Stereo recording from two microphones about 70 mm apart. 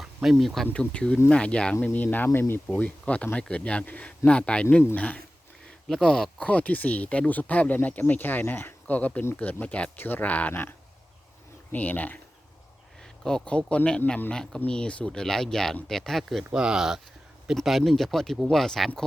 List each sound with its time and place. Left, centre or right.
0.0 s speech: centre
0.7 s speech: centre
13.2 s speech: centre
16.4 s speech: centre